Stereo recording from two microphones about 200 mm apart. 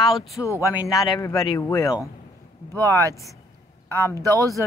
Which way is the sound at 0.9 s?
15° left (ahead or behind).